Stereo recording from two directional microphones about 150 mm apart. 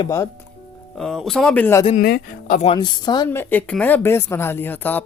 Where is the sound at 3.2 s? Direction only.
15° left (ahead or behind).